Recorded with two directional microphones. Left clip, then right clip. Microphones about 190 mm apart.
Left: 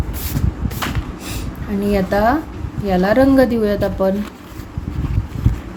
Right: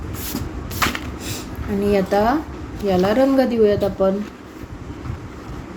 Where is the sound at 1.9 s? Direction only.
10° left (ahead or behind).